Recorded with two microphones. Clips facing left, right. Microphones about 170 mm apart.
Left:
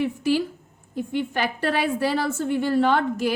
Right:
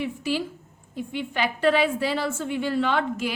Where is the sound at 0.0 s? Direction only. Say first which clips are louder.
Left 5 dB; 50° left (ahead or behind).